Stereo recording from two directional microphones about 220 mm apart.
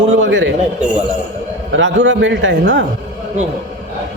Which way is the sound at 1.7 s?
55° right (ahead or behind).